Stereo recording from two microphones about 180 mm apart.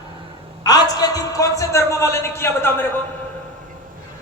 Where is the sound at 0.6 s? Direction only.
20° left (ahead or behind).